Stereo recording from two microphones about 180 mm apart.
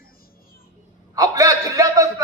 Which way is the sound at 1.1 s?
20° right (ahead or behind).